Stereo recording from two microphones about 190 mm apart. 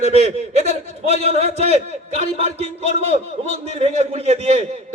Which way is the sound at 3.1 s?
30° right (ahead or behind).